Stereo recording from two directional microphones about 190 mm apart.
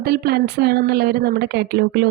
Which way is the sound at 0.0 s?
55° right (ahead or behind).